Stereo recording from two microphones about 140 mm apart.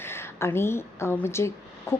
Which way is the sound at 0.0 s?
20° left (ahead or behind).